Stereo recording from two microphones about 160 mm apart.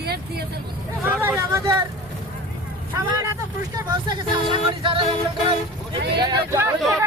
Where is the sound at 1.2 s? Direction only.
15° right (ahead or behind).